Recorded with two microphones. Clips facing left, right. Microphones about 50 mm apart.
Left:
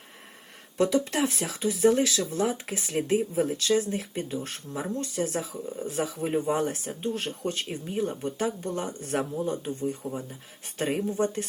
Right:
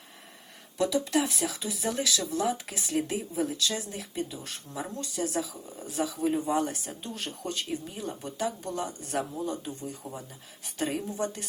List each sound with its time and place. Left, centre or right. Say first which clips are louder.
0.8 s speech: left 2 dB; left